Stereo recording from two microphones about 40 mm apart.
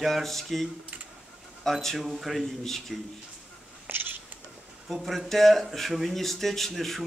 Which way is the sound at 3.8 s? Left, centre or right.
Right.